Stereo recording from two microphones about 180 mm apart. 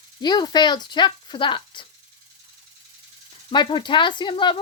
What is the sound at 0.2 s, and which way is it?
Speech, 25° left (ahead or behind).